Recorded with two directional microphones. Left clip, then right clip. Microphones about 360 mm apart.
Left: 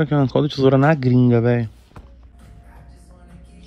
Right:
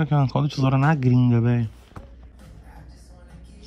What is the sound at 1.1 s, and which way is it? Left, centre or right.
Speech, left.